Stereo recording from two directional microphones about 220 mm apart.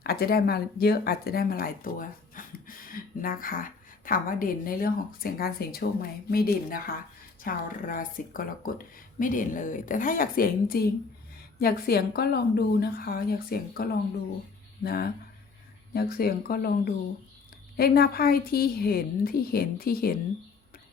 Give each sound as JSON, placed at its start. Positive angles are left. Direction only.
{"t": 0.0, "sound": "a woman's voice", "side_deg": 45}
{"t": 14.8, "sound": "a woman's voice", "side_deg": 45}